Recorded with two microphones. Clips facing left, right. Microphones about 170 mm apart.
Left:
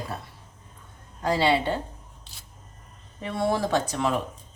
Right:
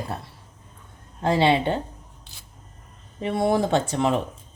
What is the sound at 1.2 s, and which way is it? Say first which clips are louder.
Speech: right 3 dB; 25° right (ahead or behind).